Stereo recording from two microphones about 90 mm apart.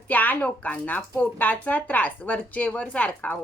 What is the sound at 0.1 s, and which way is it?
Speech, 20° left (ahead or behind).